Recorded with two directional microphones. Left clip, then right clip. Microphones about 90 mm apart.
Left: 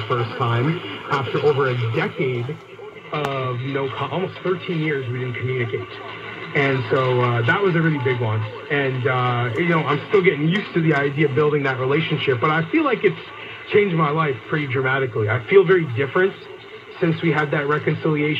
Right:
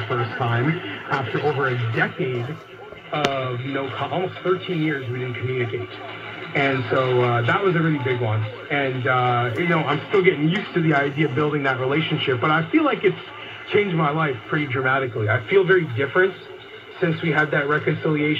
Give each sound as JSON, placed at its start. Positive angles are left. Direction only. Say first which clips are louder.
{"t": 0.1, "sound": "speech", "louder": "left 2 dB", "side_deg": 40}
{"t": 3.1, "sound": "speech", "louder": "right 1 dB", "side_deg": 25}
{"t": 6.5, "sound": "speech", "louder": "left 1 dB", "side_deg": 35}